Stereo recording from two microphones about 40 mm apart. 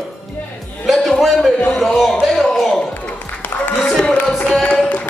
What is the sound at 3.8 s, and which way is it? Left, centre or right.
Speech, left.